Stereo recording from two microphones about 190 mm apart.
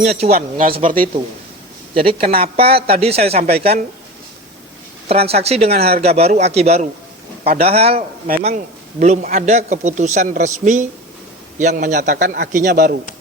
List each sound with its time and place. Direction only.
0.0 s speech: 35° right (ahead or behind)
0.3 s speech: 50° right (ahead or behind)
2.0 s speech: 30° right (ahead or behind)
5.0 s speech: 30° right (ahead or behind); by 13.0 s 50° right (ahead or behind)